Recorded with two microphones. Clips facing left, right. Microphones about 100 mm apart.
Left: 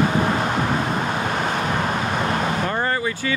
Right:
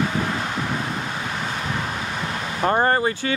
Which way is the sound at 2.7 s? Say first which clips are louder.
Right 4 dB; 40° right (ahead or behind).